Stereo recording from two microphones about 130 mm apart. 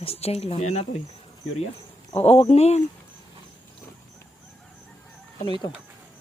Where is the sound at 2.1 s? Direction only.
50° left (ahead or behind).